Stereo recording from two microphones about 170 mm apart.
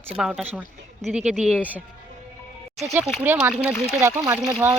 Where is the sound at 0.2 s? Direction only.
5° right (ahead or behind).